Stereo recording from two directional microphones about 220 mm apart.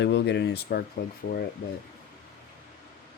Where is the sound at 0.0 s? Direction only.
50° left (ahead or behind).